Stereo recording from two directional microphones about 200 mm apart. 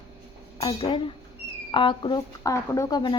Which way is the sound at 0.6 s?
25° left (ahead or behind).